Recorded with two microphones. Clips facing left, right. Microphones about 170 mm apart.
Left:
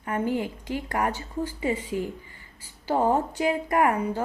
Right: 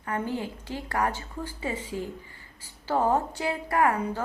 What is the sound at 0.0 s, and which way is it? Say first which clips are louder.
A woman's voice: left 4 dB; 15° left (ahead or behind).